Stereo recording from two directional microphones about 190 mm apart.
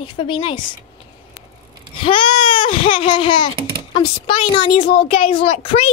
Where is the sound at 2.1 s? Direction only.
25° left (ahead or behind).